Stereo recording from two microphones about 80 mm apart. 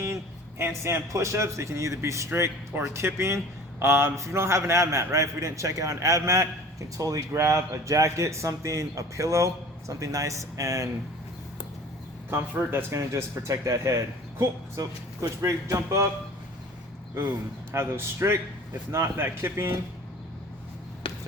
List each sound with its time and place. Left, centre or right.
0.6 s speech: right
12.7 s speech: right
17.7 s speech: right
21.0 s a sound: left